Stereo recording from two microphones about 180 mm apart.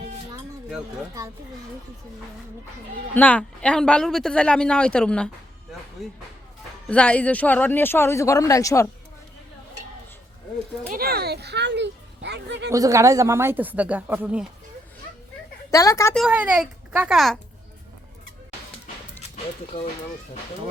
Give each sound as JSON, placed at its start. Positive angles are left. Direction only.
{"t": 3.2, "sound": "a woman's voice", "side_deg": 10}
{"t": 10.9, "sound": "speech", "side_deg": -55}
{"t": 12.7, "sound": "speech", "side_deg": -15}
{"t": 15.7, "sound": "speech", "side_deg": 20}
{"t": 16.1, "sound": "a woman's voice", "side_deg": -5}